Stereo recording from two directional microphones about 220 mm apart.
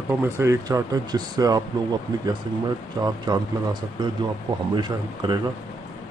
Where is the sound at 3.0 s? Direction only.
20° right (ahead or behind).